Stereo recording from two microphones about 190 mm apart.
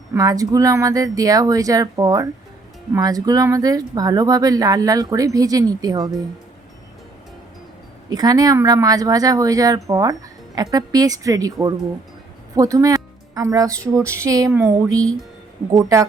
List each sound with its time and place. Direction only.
0.1 s speech: 20° right (ahead or behind)
8.1 s speech: 20° right (ahead or behind)